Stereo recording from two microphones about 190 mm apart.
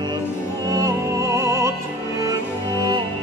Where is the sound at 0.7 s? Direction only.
20° right (ahead or behind).